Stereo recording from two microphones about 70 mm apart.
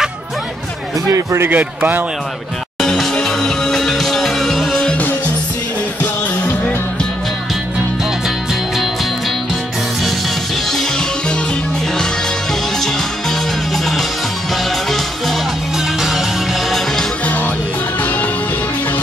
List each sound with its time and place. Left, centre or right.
1.1 s speech: right
1.5 s speech: right
2.8 s music: centre
10.7 s music: centre
16.0 s music: centre